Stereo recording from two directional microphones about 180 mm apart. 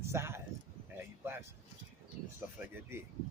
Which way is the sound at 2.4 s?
10° right (ahead or behind).